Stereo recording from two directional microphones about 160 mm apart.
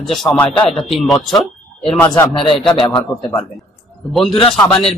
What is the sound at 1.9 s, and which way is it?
A man's voice, 15° left (ahead or behind).